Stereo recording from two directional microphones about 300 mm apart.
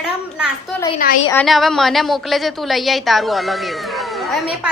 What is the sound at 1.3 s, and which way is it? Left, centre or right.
A woman's voice, centre.